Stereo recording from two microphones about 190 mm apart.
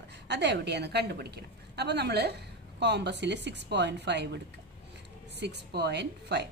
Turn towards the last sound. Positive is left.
turn(degrees=-65)  # may be behind; listen again after turning